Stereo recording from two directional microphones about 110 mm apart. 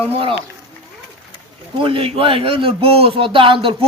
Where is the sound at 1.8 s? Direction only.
55° right (ahead or behind).